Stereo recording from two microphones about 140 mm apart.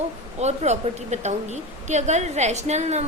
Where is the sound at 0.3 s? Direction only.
55° right (ahead or behind).